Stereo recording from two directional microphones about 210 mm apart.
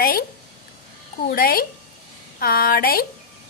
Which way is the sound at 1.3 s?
45° left (ahead or behind).